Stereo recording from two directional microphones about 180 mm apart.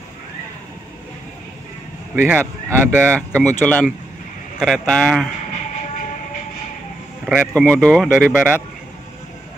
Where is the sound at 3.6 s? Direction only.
5° left (ahead or behind).